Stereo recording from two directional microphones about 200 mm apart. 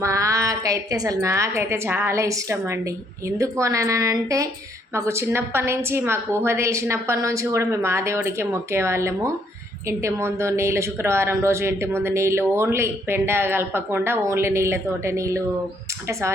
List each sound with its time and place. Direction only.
0.0 s speech: 15° right (ahead or behind)